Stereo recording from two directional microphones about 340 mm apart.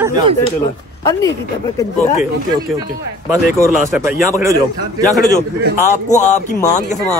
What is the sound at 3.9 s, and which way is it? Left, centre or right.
Speech, centre.